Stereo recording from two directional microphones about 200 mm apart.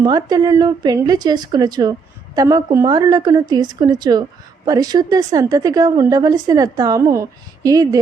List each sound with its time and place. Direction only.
0.0 s a woman's voice: 20° right (ahead or behind)